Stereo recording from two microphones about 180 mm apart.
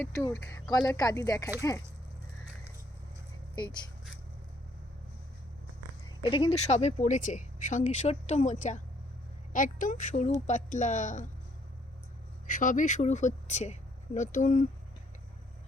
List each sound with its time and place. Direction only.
0.0 s speech: 15° left (ahead or behind)
3.5 s speech: 25° left (ahead or behind)
6.2 s speech: 30° left (ahead or behind)
12.5 s speech: 45° left (ahead or behind)